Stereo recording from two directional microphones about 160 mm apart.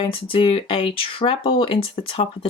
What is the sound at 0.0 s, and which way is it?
Speech, 35° left (ahead or behind).